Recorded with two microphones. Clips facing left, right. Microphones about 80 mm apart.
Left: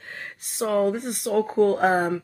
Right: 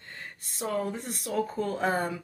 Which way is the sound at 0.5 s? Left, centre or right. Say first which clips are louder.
Left 9 dB; left.